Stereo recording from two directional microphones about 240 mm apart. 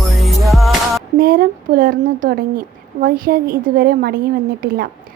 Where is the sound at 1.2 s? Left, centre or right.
Right.